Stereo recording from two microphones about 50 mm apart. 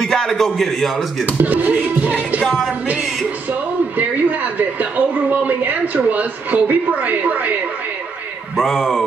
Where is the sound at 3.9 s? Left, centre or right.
Right.